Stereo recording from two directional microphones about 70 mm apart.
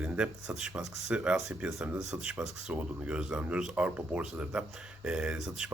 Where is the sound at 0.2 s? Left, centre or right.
Centre.